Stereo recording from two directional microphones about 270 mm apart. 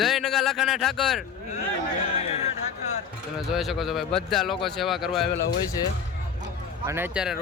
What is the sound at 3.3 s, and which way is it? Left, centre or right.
Speech, centre.